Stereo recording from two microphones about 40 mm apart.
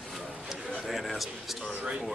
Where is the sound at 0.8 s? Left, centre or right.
Centre.